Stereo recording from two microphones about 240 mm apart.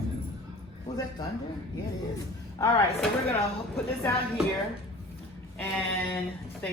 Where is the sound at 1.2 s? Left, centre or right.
Centre.